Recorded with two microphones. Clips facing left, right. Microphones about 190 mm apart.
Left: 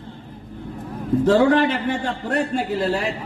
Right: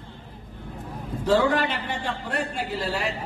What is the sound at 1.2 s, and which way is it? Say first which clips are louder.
Speech: left 5 dB; 45° left (ahead or behind).